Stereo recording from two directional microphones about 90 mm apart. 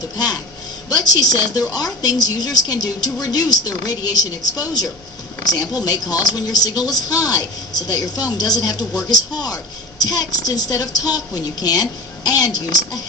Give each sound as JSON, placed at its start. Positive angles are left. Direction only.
{"t": 0.9, "sound": "a woman's voice", "side_deg": 45}